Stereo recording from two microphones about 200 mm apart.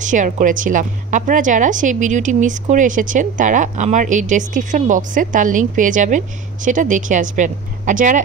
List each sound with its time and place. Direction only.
0.0 s a woman's voice: 40° right (ahead or behind)